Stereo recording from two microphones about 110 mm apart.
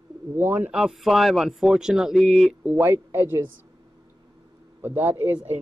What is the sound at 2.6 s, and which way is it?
Speech, 15° right (ahead or behind).